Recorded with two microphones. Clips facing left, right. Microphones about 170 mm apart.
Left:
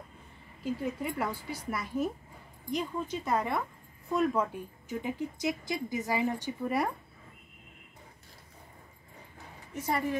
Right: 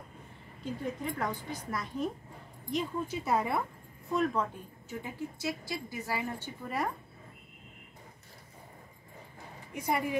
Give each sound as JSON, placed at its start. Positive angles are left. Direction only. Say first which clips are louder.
{"t": 1.0, "sound": "a woman's voice", "louder": "left 1 dB", "side_deg": 10}
{"t": 2.7, "sound": "speech", "louder": "even", "side_deg": -5}
{"t": 4.1, "sound": "a woman's voice", "louder": "left 2 dB", "side_deg": 5}
{"t": 5.0, "sound": "a woman's voice", "louder": "left 4 dB", "side_deg": 15}
{"t": 9.8, "sound": "speech", "louder": "even", "side_deg": -10}